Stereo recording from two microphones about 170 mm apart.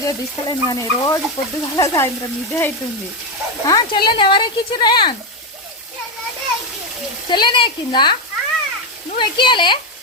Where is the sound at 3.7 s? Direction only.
25° left (ahead or behind).